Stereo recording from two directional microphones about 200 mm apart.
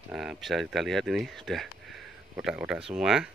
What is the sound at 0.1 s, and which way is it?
Speech, centre (ahead or behind).